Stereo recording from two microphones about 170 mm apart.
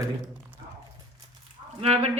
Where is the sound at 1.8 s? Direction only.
35° right (ahead or behind).